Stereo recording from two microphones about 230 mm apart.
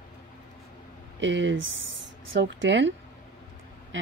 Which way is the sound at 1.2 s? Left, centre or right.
Right.